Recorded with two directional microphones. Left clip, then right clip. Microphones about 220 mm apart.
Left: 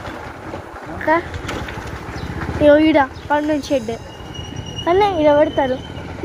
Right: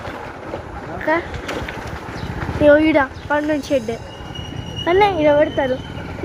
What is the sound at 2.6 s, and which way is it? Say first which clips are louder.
A woman's voice: left 1 dB; centre (ahead or behind).